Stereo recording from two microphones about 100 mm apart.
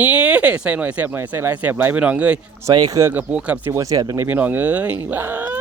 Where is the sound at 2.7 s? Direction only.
40° right (ahead or behind).